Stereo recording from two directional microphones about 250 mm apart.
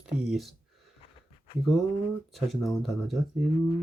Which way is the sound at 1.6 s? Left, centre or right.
Centre.